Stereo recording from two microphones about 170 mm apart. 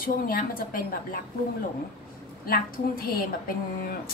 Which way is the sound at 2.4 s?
60° left (ahead or behind).